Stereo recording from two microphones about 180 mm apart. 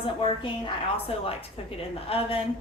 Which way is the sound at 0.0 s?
30° left (ahead or behind).